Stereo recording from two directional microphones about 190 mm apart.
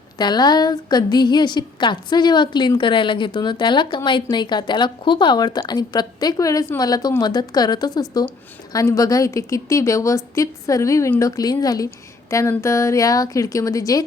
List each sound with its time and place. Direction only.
0.2 s a woman's voice: 20° left (ahead or behind)